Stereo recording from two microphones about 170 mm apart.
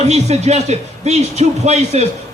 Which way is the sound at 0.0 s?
40° right (ahead or behind).